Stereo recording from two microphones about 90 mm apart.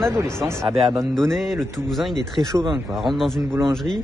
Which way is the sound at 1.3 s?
Centre (ahead or behind).